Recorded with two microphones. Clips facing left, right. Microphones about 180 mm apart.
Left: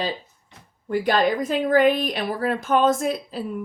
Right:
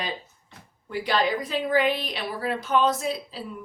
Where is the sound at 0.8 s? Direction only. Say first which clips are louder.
Left 5 dB; 50° left (ahead or behind).